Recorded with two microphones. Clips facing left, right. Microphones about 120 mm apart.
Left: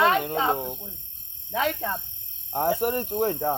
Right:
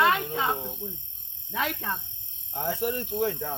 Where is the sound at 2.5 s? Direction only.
50° left (ahead or behind).